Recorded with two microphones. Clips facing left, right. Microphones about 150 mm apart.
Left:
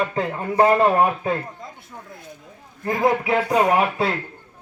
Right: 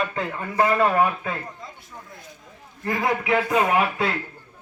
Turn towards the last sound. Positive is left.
turn(degrees=35)  # may be behind; listen again after turning